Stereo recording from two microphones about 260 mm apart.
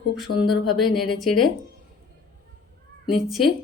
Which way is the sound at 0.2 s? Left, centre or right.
Centre.